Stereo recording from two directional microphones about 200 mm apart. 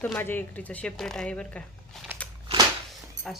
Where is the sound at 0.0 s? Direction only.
10° left (ahead or behind).